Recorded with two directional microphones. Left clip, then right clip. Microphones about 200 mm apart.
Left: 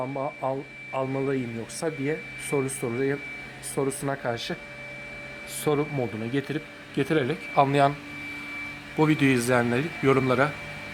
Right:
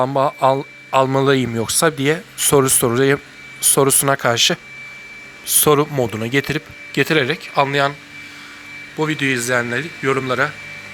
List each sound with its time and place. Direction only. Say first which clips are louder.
0.0 s a man's voice: right 14 dB; 35° right (ahead or behind); by 7.3 s 15° right (ahead or behind)
7.5 s a man's voice: right 3 dB; 5° right (ahead or behind)
9.0 s a man's voice: right 3 dB; centre (ahead or behind)